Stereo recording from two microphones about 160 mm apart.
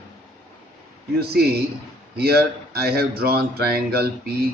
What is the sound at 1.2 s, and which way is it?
Speech, 80° right.